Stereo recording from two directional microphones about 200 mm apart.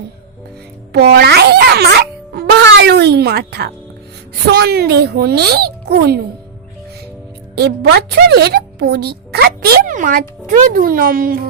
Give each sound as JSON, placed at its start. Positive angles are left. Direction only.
{"t": 0.9, "sound": "a child's voice", "side_deg": -55}
{"t": 7.5, "sound": "a woman's voice", "side_deg": -55}